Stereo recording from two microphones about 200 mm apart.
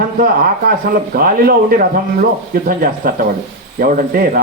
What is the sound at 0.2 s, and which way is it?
Speech, 45° right (ahead or behind).